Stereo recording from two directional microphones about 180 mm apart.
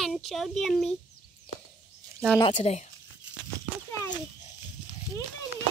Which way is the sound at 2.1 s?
10° left (ahead or behind).